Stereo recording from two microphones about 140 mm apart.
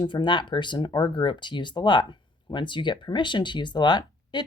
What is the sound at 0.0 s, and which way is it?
Speech, 35° left (ahead or behind).